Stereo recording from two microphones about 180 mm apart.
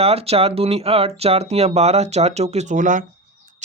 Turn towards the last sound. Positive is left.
turn(degrees=-45)  # may be behind; listen again after turning